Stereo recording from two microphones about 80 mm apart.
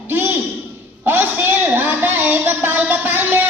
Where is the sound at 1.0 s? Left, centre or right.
Right.